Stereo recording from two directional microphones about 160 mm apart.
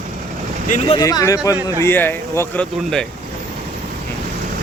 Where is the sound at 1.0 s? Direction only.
20° left (ahead or behind).